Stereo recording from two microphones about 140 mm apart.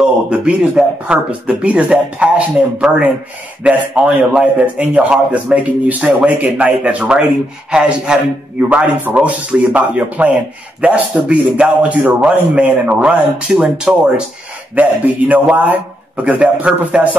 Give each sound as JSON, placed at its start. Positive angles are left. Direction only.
{"t": 0.0, "sound": "a man's voice", "side_deg": -5}